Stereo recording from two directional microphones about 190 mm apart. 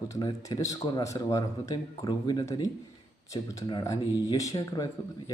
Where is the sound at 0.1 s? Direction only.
20° left (ahead or behind).